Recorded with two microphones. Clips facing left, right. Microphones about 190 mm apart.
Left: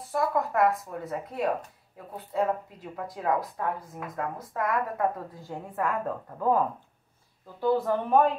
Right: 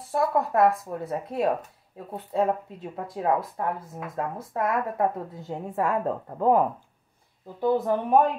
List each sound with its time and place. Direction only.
0.1 s a woman's voice: 30° right (ahead or behind)